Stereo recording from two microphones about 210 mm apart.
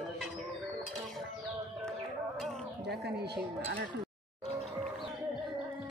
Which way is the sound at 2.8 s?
50° right (ahead or behind).